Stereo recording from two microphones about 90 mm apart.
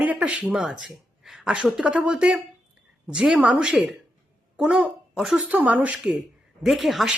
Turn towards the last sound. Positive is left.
turn(degrees=0)  # may be behind; listen again after turning